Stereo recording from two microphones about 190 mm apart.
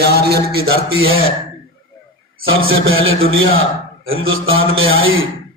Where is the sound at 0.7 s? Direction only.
90° right.